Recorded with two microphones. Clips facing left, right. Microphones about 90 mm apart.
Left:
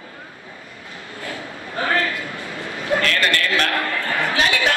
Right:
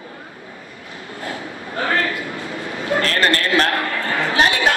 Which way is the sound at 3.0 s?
35° right (ahead or behind).